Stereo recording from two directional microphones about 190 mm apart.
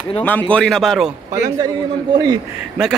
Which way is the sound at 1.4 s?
20° right (ahead or behind).